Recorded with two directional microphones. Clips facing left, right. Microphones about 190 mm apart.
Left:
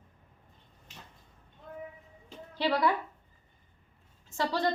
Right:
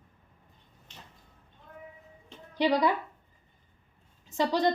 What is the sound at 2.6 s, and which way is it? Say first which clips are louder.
Speech: right 3 dB; 15° right (ahead or behind).